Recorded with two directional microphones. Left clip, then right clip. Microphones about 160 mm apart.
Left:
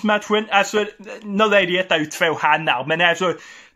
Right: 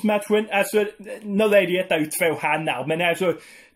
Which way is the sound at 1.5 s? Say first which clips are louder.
Even; 45° right (ahead or behind).